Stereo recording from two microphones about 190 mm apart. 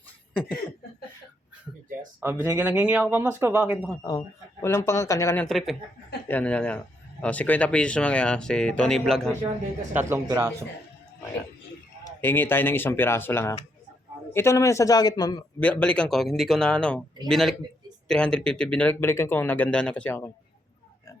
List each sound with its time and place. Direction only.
2.2 s speech: 10° right (ahead or behind)
4.6 s speech: 15° left (ahead or behind)
5.5 s a man's voice: centre (ahead or behind)
9.9 s speech: 10° right (ahead or behind)
12.0 s speech: 10° left (ahead or behind)
15.6 s a man's voice: 5° left (ahead or behind)